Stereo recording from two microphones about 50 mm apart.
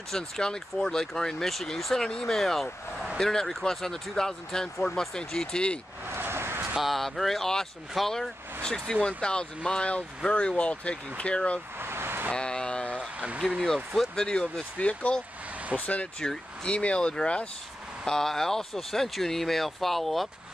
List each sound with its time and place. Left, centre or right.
0.1 s speech: centre
6.0 s vehicle: right
6.8 s speech: centre
8.6 s speech: centre
11.8 s vehicle: right
12.3 s speech: centre
13.9 s speech: centre
14.8 s speech: left
18.0 s speech: centre